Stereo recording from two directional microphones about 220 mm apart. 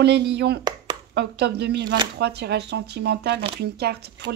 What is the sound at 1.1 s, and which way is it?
Speech, 50° right (ahead or behind).